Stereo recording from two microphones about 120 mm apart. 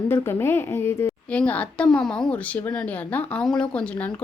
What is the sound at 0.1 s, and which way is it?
Speech, 20° left (ahead or behind).